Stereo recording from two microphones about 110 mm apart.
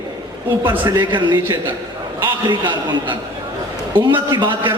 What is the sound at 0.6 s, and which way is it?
Speech, 45° right (ahead or behind).